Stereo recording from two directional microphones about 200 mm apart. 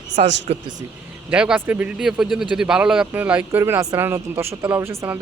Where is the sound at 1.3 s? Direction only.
5° right (ahead or behind).